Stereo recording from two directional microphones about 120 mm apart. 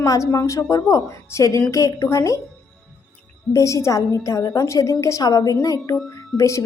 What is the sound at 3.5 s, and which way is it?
A woman's voice, 25° left (ahead or behind).